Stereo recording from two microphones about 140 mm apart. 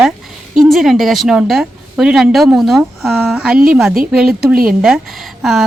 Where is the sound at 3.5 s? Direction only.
90° right.